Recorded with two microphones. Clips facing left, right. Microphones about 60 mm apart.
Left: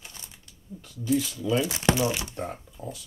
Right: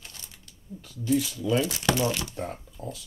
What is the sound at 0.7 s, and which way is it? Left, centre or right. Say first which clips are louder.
Speech: even; centre.